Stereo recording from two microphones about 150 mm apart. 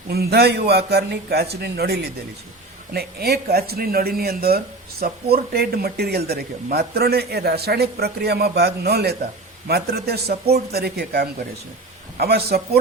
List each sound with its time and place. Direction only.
0.1 s speech: 90° right